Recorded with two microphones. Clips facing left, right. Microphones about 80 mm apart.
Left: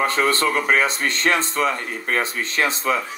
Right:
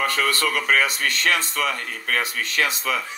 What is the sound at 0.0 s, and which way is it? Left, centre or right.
A man's voice, left.